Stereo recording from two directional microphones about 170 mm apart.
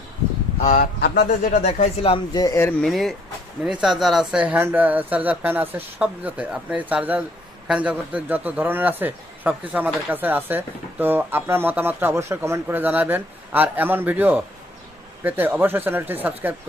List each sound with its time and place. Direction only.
0.6 s speech: 50° left (ahead or behind)
0.9 s speech: 75° left (ahead or behind)
1.3 s speech: 50° left (ahead or behind); by 2.7 s 15° left (ahead or behind)
2.8 s a man's voice: centre (ahead or behind)